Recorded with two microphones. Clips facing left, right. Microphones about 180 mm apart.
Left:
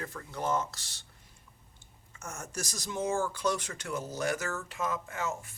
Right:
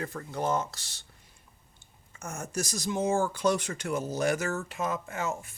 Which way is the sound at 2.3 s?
20° right (ahead or behind).